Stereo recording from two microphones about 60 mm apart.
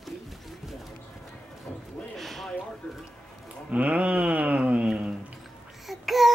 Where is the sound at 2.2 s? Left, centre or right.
Centre.